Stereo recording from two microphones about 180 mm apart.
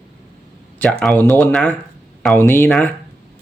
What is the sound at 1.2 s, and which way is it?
Speech, 10° left (ahead or behind).